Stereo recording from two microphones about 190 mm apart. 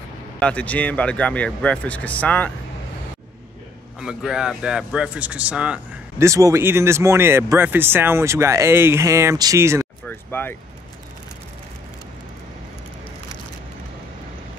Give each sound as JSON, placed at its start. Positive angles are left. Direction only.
{"t": 0.4, "sound": "speech", "side_deg": 5}
{"t": 4.0, "sound": "speech", "side_deg": -5}
{"t": 10.0, "sound": "vehicle", "side_deg": 10}